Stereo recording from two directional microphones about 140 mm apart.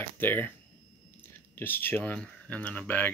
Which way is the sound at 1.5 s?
15° left (ahead or behind).